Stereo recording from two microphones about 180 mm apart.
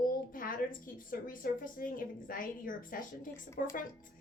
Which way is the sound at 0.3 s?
50° left (ahead or behind).